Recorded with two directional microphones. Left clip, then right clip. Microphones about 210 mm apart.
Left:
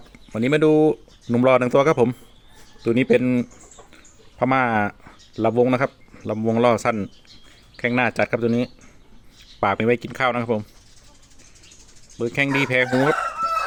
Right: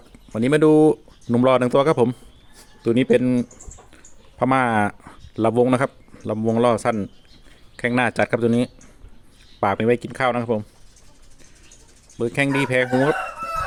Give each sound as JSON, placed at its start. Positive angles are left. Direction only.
{"t": 0.3, "sound": "speech", "side_deg": -10}
{"t": 12.1, "sound": "speech", "side_deg": -15}